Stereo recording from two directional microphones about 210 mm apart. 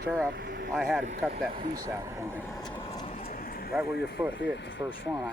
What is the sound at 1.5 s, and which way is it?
Speech, 35° right (ahead or behind).